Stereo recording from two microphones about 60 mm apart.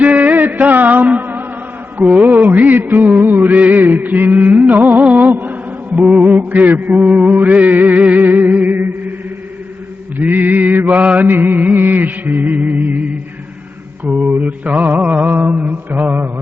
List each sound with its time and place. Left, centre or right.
0.0 s music: right
10.2 s music: right
11.3 s music: right